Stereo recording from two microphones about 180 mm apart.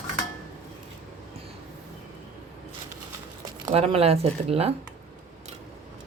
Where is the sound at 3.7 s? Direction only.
35° right (ahead or behind).